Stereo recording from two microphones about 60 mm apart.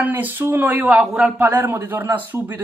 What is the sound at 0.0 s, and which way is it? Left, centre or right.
Speech, right.